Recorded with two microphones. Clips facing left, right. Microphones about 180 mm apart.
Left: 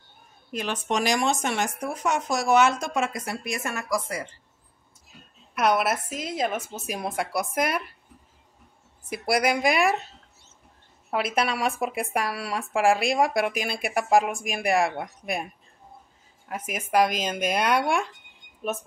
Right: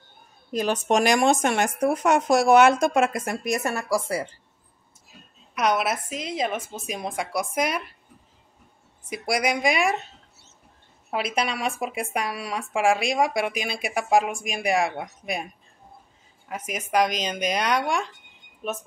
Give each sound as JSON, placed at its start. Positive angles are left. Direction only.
{"t": 0.5, "sound": "speech", "side_deg": -40}
{"t": 5.5, "sound": "speech", "side_deg": 5}
{"t": 9.2, "sound": "speech", "side_deg": 5}
{"t": 11.1, "sound": "speech", "side_deg": 0}
{"t": 16.4, "sound": "speech", "side_deg": 0}